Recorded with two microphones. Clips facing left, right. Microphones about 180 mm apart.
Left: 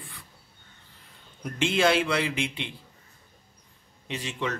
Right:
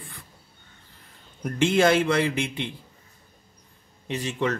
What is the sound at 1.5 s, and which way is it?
Speech, 45° right (ahead or behind).